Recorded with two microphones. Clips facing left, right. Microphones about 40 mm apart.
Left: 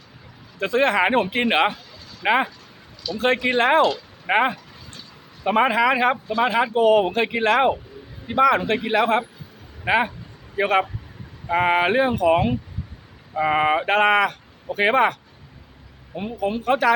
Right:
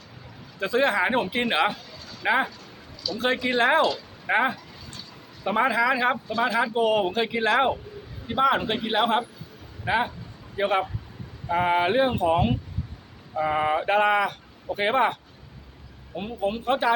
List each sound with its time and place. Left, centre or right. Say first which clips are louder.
0.6 s speech: left 3 dB; left
6.5 s speech: left 3 dB; left
6.7 s speech: left 8 dB; left
7.1 s speech: left 3 dB; left
8.4 s speech: left 3 dB; left
11.4 s speech: left 3 dB; left
13.3 s speech: left 4 dB; left
16.4 s speech: left 4 dB; left